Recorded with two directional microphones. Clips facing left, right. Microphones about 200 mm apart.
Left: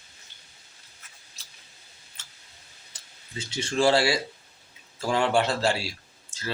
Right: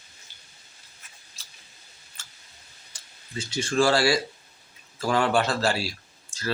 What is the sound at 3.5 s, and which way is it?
Speech, 25° left (ahead or behind).